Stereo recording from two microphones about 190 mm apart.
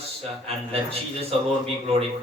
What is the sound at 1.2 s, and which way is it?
Speech, 30° right (ahead or behind).